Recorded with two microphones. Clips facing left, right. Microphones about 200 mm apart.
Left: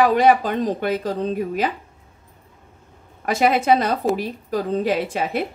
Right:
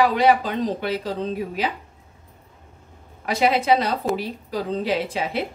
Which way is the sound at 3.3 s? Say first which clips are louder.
Left 2 dB; 50° left (ahead or behind).